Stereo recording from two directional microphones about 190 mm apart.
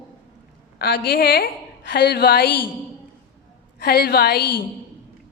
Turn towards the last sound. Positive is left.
turn(degrees=55)  # may be behind; listen again after turning